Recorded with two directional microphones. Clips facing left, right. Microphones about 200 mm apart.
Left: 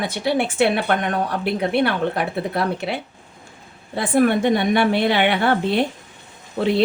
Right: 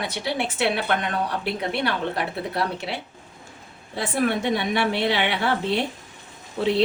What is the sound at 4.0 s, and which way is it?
Speech, 55° left (ahead or behind).